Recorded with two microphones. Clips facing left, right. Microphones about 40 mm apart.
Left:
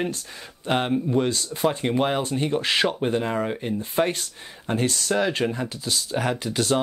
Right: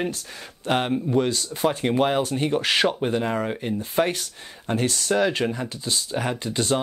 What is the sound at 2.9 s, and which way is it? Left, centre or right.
Speech, centre.